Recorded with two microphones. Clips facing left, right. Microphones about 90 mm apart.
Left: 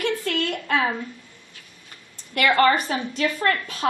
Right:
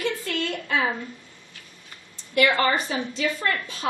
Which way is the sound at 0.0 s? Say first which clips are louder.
Left 3 dB; 55° left (ahead or behind).